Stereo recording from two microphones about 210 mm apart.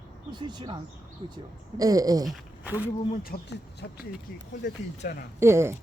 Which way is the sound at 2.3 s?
5° right (ahead or behind).